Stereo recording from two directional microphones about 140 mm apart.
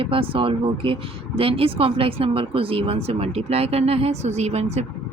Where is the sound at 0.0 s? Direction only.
40° right (ahead or behind).